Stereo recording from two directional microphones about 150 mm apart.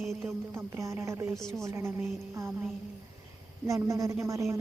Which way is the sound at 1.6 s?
20° right (ahead or behind).